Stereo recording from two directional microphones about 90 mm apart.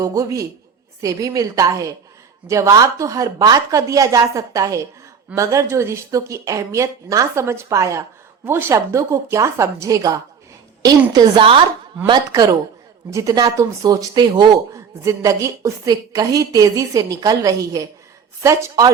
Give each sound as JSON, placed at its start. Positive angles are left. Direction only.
{"t": 0.0, "sound": "a woman's voice", "side_deg": -40}
{"t": 11.3, "sound": "speech", "side_deg": -80}
{"t": 12.3, "sound": "a woman's voice", "side_deg": -40}
{"t": 14.2, "sound": "speech", "side_deg": -55}
{"t": 14.7, "sound": "a woman's voice", "side_deg": -35}